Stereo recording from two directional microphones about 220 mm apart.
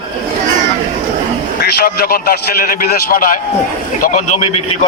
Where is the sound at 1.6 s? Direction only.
45° left (ahead or behind).